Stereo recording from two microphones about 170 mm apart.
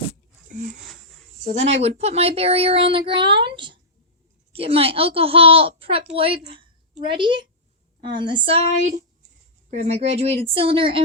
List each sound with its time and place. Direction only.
1.5 s a woman's voice: 40° right (ahead or behind)
9.6 s a woman's voice: 40° right (ahead or behind)